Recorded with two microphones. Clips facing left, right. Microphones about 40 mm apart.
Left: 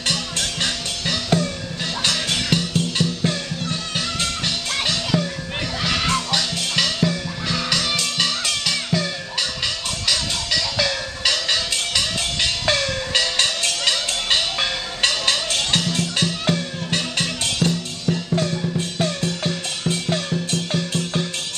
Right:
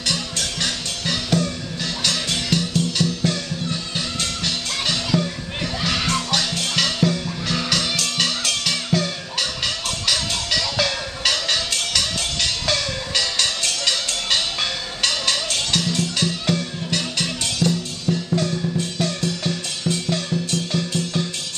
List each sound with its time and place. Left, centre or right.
0.4 s music: centre